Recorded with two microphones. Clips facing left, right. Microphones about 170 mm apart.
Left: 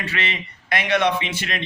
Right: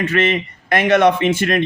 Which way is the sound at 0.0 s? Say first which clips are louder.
Right 11 dB; 50° right (ahead or behind).